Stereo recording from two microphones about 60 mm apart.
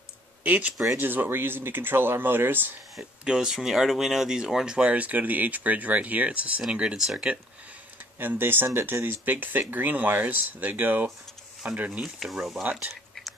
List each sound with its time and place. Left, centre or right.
0.4 s speech: right
3.0 s speech: centre
8.2 s speech: right
12.2 s speech: centre